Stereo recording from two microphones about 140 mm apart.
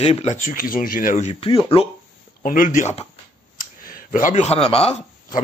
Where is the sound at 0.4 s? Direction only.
75° left (ahead or behind).